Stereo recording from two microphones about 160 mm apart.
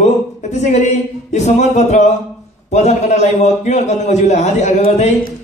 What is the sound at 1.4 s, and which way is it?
A man's voice, 45° left (ahead or behind).